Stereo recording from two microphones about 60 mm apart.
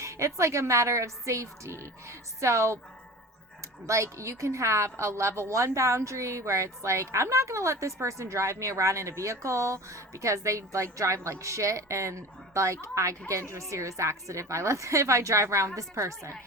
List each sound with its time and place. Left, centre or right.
0.0 s a woman's voice: right
3.8 s a woman's voice: right